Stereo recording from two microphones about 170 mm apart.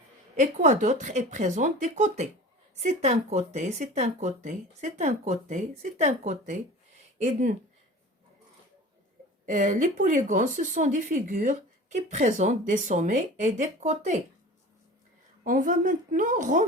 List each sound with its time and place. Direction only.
0.3 s speech: 45° right (ahead or behind)
9.5 s speech: 50° right (ahead or behind)
15.4 s speech: 50° right (ahead or behind)